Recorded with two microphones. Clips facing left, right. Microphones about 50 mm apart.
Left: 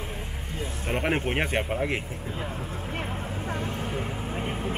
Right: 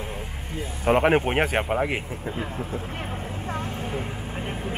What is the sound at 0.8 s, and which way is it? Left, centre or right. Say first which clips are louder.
Speech: right 9 dB; right.